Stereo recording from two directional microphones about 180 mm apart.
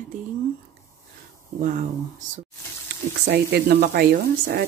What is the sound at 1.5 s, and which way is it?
Speech, 45° right (ahead or behind).